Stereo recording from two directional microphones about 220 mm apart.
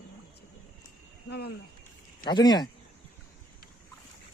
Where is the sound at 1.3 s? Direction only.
45° left (ahead or behind).